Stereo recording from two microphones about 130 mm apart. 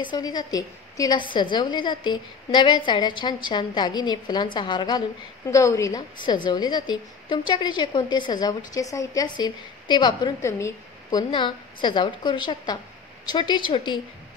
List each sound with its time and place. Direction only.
0.0 s a woman's voice: 35° left (ahead or behind)
5.5 s a woman's voice: 25° left (ahead or behind)